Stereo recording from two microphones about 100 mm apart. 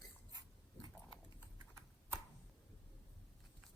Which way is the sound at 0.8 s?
50° left (ahead or behind).